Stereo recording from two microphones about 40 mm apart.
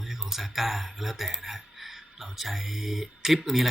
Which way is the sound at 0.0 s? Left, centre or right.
Centre.